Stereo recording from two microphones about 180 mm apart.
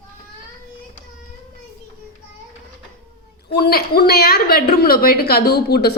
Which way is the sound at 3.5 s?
60° left (ahead or behind).